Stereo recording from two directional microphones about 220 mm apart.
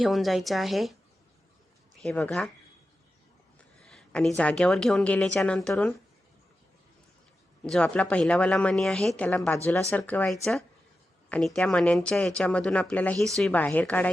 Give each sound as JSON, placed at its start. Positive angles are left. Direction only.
{"t": 0.0, "sound": "speech", "side_deg": 0}
{"t": 2.0, "sound": "speech", "side_deg": 5}
{"t": 3.8, "sound": "a sound", "side_deg": 0}
{"t": 4.4, "sound": "speech", "side_deg": 5}
{"t": 7.6, "sound": "speech", "side_deg": 5}